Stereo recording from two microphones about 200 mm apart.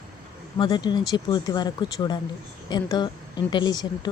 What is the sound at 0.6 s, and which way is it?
Speech, 20° left (ahead or behind).